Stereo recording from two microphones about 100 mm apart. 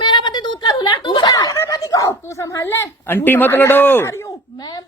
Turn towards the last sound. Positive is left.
turn(degrees=20)  # may be behind; listen again after turning